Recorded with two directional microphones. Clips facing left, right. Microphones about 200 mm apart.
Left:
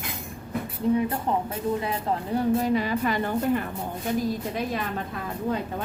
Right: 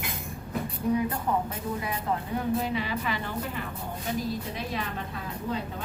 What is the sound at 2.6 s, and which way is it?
Speech, 45° left (ahead or behind).